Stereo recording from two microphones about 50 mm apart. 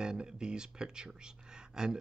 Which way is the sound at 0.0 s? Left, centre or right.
Centre.